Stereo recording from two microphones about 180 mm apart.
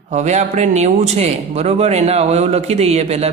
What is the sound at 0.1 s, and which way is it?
A man's voice, 40° right (ahead or behind).